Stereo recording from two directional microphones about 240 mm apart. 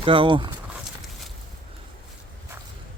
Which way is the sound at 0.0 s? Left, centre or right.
Right.